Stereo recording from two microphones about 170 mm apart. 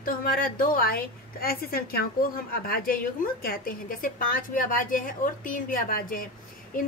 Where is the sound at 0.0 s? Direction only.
60° left (ahead or behind).